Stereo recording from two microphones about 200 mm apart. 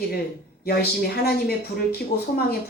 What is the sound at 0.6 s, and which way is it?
Speech, 50° left (ahead or behind).